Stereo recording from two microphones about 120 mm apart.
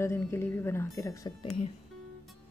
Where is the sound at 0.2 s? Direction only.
20° left (ahead or behind).